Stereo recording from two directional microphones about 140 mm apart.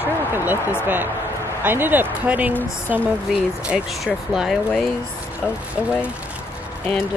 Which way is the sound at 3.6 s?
5° right (ahead or behind).